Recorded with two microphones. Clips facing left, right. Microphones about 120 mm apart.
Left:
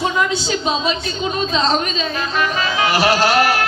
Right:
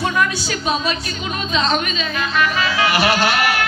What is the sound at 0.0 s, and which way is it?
A woman's voice, 20° left (ahead or behind).